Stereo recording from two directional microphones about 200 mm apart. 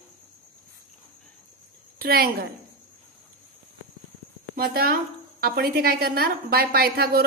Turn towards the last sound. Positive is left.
turn(degrees=-50)  # may be behind; listen again after turning